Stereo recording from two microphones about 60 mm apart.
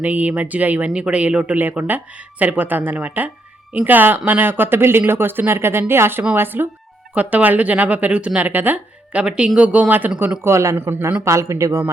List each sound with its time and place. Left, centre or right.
0.0 s a woman's voice: right
7.1 s a woman's voice: right
9.1 s a woman's voice: centre
10.4 s speech: right
10.8 s speech: right
11.3 s speech: right